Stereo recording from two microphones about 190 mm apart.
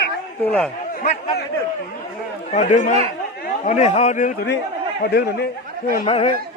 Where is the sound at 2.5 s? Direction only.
40° left (ahead or behind).